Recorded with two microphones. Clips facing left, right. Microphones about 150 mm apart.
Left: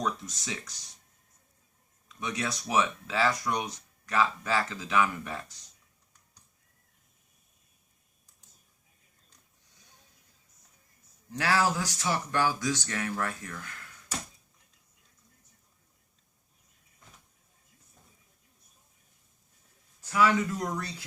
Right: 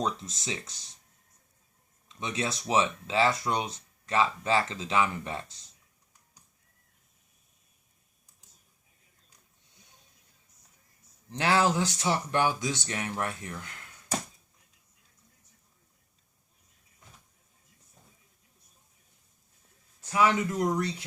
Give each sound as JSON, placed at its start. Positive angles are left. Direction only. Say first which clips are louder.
{"t": 0.0, "sound": "speech", "louder": "right 1 dB", "side_deg": -25}
{"t": 2.0, "sound": "speech", "louder": "right 1 dB", "side_deg": -25}
{"t": 11.3, "sound": "speech", "louder": "right 2 dB", "side_deg": -25}
{"t": 20.1, "sound": "speech", "louder": "even", "side_deg": -20}